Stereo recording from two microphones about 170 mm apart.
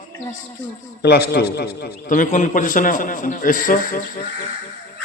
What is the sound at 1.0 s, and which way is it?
A man's voice, 70° left (ahead or behind).